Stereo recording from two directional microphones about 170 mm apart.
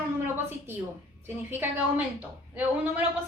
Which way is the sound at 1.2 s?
10° right (ahead or behind).